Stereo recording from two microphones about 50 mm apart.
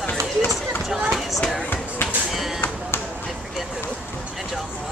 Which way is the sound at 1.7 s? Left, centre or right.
Left.